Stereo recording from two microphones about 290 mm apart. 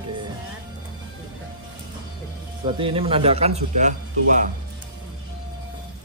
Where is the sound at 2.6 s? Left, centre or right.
Centre.